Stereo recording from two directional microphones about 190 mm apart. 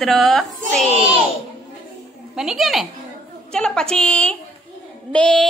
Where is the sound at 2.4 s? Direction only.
Centre (ahead or behind).